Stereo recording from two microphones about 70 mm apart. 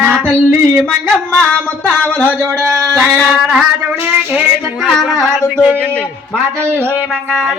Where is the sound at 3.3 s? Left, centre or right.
Centre.